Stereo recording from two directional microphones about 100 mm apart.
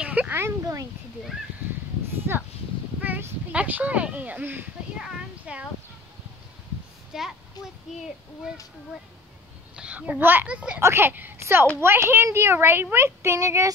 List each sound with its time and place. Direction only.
0.0 s a sound: 15° right (ahead or behind)
2.3 s a woman's voice: 20° right (ahead or behind)
4.9 s a sound: 10° right (ahead or behind)
7.1 s a child's voice: 5° right (ahead or behind)
9.8 s a woman's voice: 15° right (ahead or behind)
10.8 s a woman's voice: 25° right (ahead or behind)